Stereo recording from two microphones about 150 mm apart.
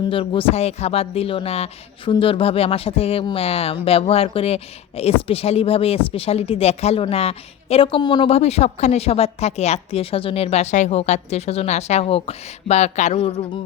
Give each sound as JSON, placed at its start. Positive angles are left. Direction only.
{"t": 0.1, "sound": "speech", "side_deg": 35}